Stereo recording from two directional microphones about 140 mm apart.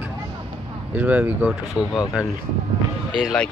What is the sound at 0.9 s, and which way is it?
Speech, 10° right (ahead or behind).